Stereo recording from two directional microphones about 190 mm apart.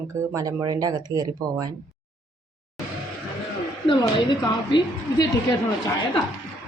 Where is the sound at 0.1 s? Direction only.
15° right (ahead or behind).